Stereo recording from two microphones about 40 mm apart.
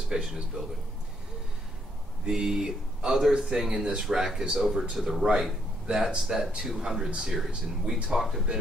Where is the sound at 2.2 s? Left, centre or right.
Centre.